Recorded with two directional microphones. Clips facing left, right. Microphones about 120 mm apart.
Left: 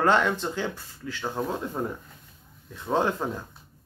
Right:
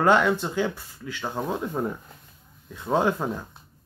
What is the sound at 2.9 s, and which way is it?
Speech, 15° right (ahead or behind).